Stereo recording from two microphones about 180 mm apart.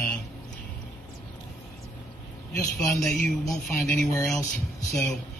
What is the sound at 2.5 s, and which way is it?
Speech, 20° left (ahead or behind).